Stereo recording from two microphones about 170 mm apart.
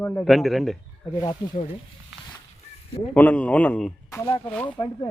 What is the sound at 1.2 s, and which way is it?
Speech, 20° left (ahead or behind).